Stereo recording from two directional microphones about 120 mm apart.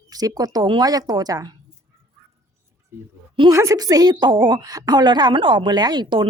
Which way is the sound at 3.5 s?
25° right (ahead or behind).